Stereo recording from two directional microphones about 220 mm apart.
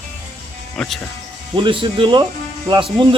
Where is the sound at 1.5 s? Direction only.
25° right (ahead or behind).